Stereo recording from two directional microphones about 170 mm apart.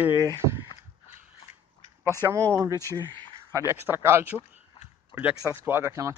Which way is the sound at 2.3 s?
20° right (ahead or behind).